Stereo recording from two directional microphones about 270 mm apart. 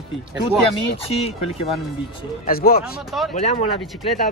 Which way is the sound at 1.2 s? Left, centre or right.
Left.